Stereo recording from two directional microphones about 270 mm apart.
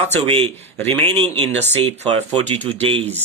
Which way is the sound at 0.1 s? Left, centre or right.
Right.